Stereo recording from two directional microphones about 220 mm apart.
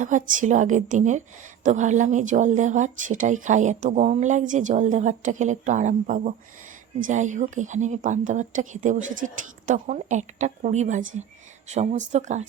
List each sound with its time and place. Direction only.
0.0 s speech: 35° right (ahead or behind)